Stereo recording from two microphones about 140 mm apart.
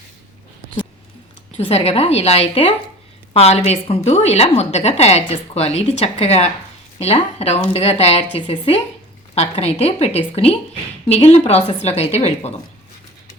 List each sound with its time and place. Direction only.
1.5 s a woman's voice: 45° left (ahead or behind)